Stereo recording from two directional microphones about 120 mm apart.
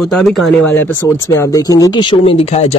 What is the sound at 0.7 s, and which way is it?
Speech, 15° left (ahead or behind).